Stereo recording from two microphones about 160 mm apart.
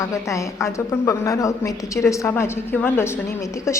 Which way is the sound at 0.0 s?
20° left (ahead or behind).